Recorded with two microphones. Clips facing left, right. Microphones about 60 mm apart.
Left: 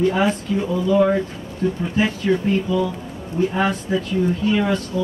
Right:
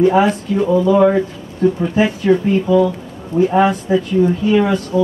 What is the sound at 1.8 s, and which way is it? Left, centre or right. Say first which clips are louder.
Speech: right 5 dB; centre.